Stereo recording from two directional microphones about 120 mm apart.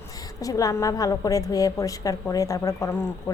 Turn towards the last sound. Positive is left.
turn(degrees=25)  # may be behind; listen again after turning